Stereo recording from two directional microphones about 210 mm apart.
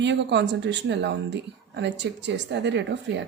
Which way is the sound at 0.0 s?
55° right (ahead or behind).